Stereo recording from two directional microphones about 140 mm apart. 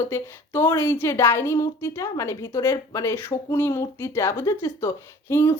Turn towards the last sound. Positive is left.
turn(degrees=20)  # may be behind; listen again after turning